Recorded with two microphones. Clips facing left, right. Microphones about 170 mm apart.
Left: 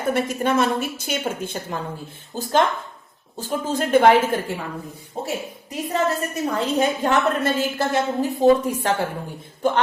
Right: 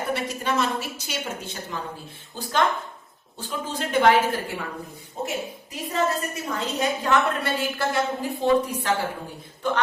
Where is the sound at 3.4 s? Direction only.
45° left (ahead or behind).